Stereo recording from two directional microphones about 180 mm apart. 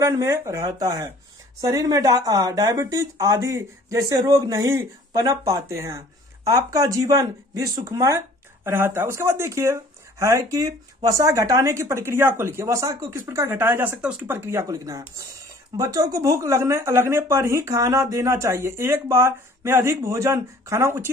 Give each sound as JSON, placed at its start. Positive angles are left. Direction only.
{"t": 0.0, "sound": "speech", "side_deg": -15}